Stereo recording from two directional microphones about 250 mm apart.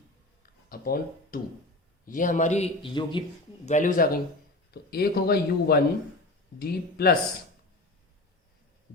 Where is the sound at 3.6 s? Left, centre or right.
Left.